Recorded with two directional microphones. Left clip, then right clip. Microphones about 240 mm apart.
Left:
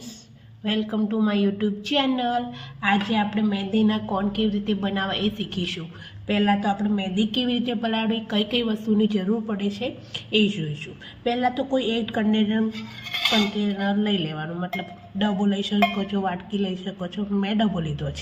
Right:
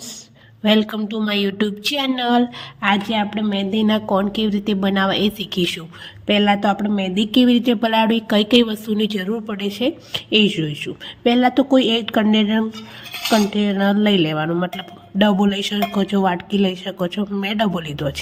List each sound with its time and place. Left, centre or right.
0.6 s speech: right